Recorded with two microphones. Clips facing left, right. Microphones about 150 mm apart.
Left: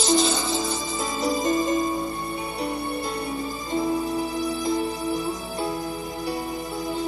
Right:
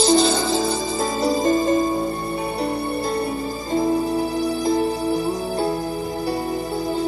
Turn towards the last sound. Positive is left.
turn(degrees=-35)  # may be behind; listen again after turning